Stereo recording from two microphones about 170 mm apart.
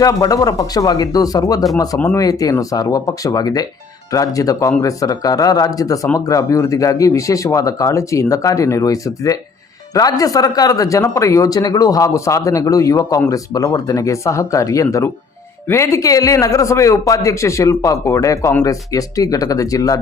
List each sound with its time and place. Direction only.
0.0 s speech: 20° left (ahead or behind)